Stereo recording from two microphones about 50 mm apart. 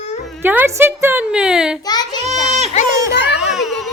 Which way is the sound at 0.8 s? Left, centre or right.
Right.